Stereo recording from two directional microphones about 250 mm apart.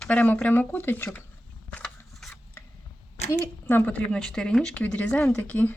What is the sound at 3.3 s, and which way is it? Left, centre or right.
Speech, centre.